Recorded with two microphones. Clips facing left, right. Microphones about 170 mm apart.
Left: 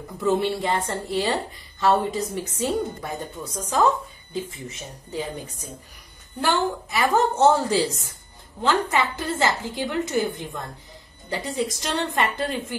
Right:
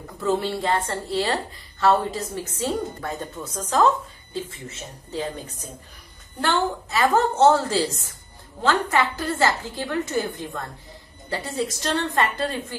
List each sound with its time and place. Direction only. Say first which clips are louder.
0.2 s a woman's voice: left 1 dB; 15° left (ahead or behind)
6.4 s a woman's voice: even; 10° left (ahead or behind)
8.9 s a woman's voice: right 1 dB; 20° left (ahead or behind)